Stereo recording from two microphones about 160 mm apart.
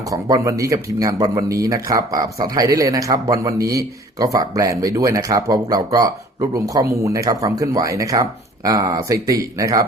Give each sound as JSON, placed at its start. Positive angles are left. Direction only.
{"t": 0.0, "sound": "speech", "side_deg": -20}